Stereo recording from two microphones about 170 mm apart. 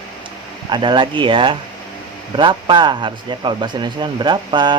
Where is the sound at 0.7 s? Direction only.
25° right (ahead or behind).